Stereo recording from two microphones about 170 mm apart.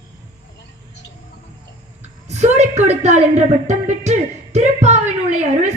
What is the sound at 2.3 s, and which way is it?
A woman's voice, 40° right (ahead or behind).